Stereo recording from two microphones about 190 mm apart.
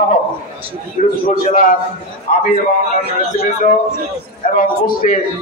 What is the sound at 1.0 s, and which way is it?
Speech, 45° left (ahead or behind).